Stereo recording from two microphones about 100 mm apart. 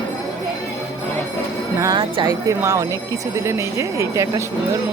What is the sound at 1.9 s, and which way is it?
Speech, 60° right (ahead or behind).